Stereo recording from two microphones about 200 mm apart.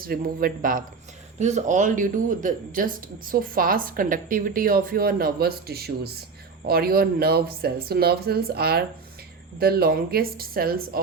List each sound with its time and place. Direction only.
0.0 s a man's voice: 45° right (ahead or behind)